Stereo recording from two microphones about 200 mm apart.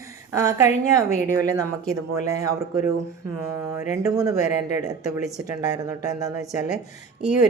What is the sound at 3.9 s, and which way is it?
Speech, 15° right (ahead or behind).